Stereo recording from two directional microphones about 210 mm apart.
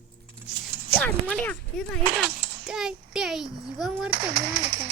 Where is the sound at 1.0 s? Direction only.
5° left (ahead or behind).